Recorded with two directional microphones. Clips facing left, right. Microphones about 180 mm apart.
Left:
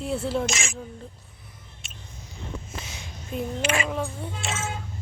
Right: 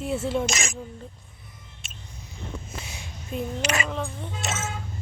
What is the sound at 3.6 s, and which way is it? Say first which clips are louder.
Speech: left 2 dB; 40° right (ahead or behind).